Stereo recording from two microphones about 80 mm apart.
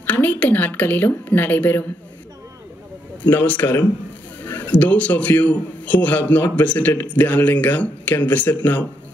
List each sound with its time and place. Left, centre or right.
0.0 s speech: left
3.2 s a man's voice: left